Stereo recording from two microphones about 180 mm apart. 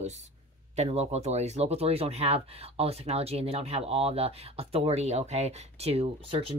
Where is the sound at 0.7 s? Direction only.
35° right (ahead or behind).